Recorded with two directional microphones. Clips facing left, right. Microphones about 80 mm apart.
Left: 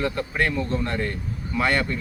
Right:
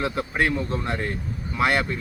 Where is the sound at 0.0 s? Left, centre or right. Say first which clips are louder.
Even; centre.